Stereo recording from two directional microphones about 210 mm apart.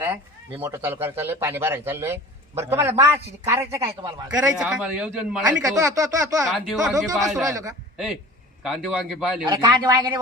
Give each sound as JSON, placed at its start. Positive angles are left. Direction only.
{"t": 0.0, "sound": "speech", "side_deg": -10}
{"t": 4.5, "sound": "a man's voice", "side_deg": -5}
{"t": 5.6, "sound": "speech", "side_deg": -15}
{"t": 6.4, "sound": "a man's voice", "side_deg": 0}
{"t": 9.5, "sound": "a man's voice", "side_deg": -20}